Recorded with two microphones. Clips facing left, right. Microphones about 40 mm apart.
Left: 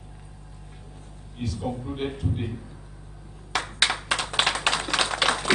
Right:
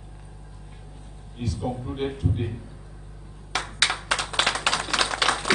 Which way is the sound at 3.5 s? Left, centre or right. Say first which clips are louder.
Even; centre.